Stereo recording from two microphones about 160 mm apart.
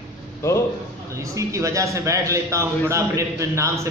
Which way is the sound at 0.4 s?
15° left (ahead or behind).